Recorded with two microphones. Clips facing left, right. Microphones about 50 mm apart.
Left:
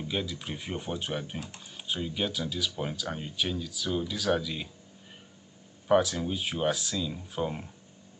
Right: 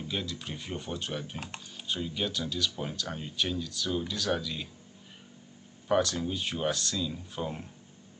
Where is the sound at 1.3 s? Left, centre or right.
Right.